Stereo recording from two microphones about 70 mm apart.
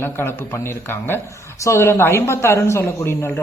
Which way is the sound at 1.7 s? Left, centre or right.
Left.